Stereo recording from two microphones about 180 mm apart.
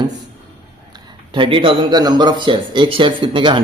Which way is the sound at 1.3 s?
30° right (ahead or behind).